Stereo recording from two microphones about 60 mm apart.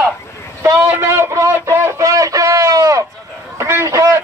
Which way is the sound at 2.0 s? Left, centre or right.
Right.